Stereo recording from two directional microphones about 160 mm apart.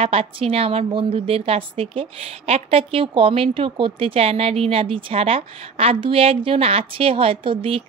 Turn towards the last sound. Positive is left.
turn(degrees=-35)  # may be behind; listen again after turning